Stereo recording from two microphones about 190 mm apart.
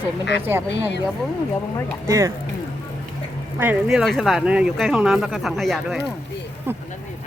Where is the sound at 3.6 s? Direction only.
5° right (ahead or behind).